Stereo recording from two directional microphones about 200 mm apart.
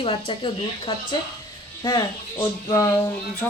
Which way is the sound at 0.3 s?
25° left (ahead or behind).